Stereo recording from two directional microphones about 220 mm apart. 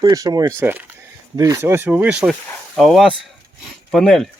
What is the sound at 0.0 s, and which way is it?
Speech, 15° right (ahead or behind).